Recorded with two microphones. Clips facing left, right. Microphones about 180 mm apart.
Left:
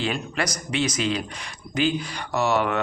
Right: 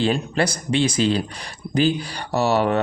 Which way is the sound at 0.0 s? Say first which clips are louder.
Right 6 dB; 30° right (ahead or behind).